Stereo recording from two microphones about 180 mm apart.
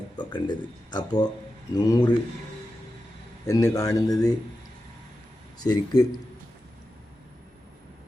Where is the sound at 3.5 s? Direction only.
20° left (ahead or behind).